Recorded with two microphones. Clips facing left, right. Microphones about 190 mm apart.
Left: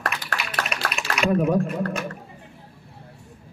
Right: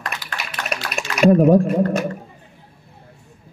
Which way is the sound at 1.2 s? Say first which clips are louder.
Right 8 dB; 40° right (ahead or behind).